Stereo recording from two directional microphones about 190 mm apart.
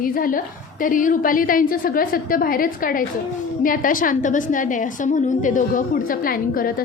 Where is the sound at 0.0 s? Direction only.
50° left (ahead or behind).